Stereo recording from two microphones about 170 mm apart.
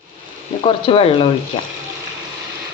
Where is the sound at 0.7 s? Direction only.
35° left (ahead or behind).